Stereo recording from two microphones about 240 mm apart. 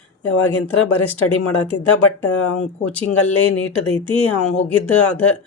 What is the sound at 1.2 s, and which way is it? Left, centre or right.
Speech, left.